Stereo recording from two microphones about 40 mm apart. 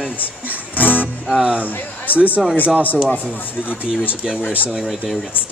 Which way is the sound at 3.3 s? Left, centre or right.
Left.